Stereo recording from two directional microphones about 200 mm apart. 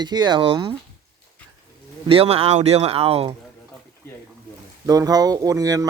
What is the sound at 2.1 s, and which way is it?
Speech, 30° right (ahead or behind).